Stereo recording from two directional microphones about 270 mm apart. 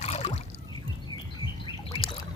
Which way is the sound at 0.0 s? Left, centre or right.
Left.